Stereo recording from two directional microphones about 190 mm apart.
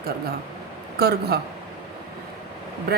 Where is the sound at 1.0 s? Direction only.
55° right (ahead or behind).